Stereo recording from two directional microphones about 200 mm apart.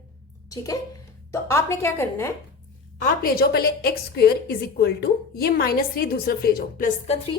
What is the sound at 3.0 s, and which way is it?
A woman's voice, 50° left (ahead or behind).